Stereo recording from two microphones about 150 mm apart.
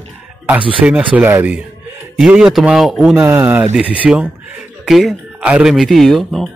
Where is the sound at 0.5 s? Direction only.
10° right (ahead or behind).